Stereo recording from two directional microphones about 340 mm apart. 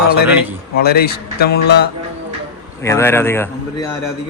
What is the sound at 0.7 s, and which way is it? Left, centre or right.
Speech, left.